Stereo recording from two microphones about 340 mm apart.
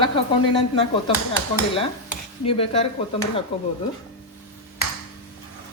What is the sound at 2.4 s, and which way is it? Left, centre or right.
Speech, centre.